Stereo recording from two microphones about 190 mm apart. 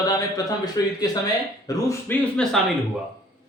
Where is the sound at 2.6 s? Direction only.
Centre (ahead or behind).